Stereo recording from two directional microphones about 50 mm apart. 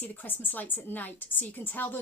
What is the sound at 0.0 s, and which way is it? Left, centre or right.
A woman's voice, left.